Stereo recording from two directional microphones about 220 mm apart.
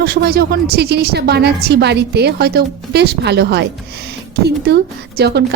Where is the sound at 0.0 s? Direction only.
45° right (ahead or behind).